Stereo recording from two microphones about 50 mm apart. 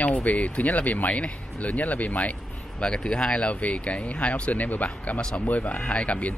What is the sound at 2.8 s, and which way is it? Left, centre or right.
Speech, left.